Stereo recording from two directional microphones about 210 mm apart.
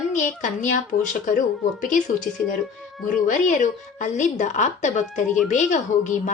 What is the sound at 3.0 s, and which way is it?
A woman's voice, 40° left (ahead or behind).